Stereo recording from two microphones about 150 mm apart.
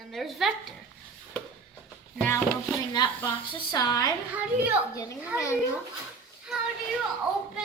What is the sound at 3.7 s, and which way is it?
Speech, 25° left (ahead or behind).